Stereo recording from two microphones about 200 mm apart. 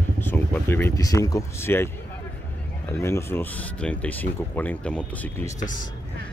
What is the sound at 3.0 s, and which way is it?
Speech, 10° left (ahead or behind).